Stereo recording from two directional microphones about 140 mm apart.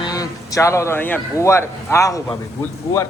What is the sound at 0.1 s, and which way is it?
A man's voice, 25° left (ahead or behind).